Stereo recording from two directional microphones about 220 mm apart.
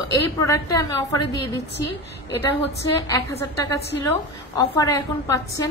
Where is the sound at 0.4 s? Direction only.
15° left (ahead or behind).